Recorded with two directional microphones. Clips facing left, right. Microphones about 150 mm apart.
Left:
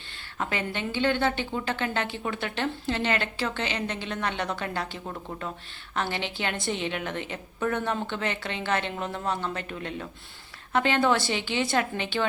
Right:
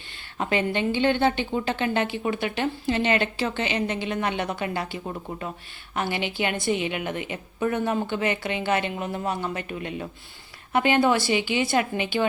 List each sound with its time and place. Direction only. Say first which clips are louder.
0.3 s a woman's voice: right 6 dB; 20° right (ahead or behind)